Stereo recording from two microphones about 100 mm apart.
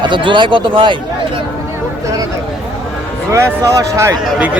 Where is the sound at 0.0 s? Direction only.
55° right (ahead or behind).